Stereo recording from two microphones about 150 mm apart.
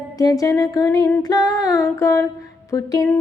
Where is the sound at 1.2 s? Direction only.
25° left (ahead or behind).